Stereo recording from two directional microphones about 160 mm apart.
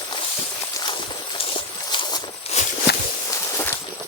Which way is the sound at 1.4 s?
35° left (ahead or behind).